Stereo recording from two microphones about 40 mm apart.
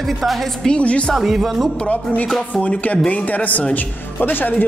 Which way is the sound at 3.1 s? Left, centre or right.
Left.